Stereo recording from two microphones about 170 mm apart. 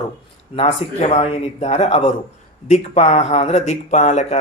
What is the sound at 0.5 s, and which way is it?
Speech, 35° left (ahead or behind).